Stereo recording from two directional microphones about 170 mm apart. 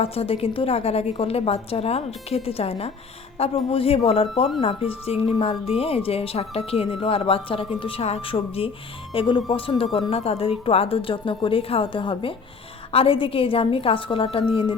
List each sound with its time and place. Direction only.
0.0 s a woman's voice: 35° left (ahead or behind)